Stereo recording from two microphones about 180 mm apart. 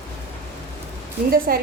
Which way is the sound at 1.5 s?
55° right (ahead or behind).